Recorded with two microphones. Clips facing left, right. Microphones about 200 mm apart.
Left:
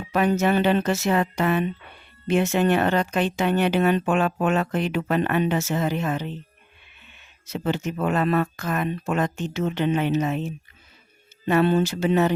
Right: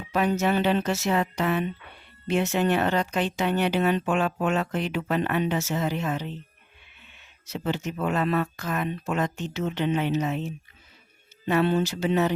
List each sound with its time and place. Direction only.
0.1 s speech: 55° left (ahead or behind)
7.4 s speech: 50° left (ahead or behind)
11.4 s speech: 50° left (ahead or behind)